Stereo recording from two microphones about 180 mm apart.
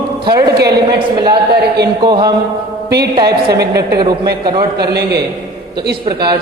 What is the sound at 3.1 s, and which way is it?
A man's voice, 20° right (ahead or behind).